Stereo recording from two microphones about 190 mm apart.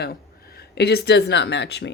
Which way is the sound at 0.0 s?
55° left (ahead or behind).